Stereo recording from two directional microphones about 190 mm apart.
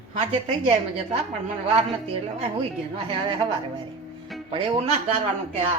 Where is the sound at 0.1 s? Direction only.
30° right (ahead or behind).